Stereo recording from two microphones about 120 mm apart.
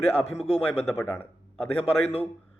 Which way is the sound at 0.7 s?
20° left (ahead or behind).